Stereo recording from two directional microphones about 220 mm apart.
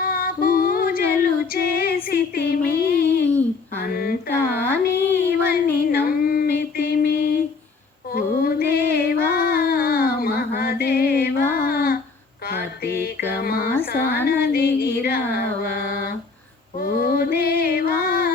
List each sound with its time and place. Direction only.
0.0 s music: 40° left (ahead or behind)
1.5 s female singing: 45° left (ahead or behind)
3.8 s speech: 45° left (ahead or behind)
5.1 s a sound: 45° left (ahead or behind)
8.1 s music: 45° left (ahead or behind)
11.6 s humming: 45° left (ahead or behind)
12.5 s mantra: 45° left (ahead or behind)
13.9 s a woman's voice: 45° left (ahead or behind)
14.3 s music: 45° left (ahead or behind)